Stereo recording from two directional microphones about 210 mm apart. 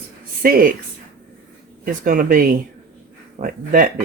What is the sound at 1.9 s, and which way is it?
Speech, 40° right (ahead or behind).